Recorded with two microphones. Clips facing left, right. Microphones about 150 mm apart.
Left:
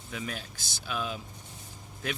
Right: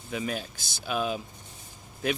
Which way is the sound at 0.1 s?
15° right (ahead or behind).